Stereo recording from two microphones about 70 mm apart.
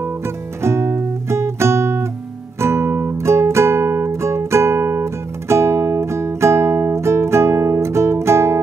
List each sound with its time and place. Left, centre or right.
0.6 s guitar: right
2.6 s music: right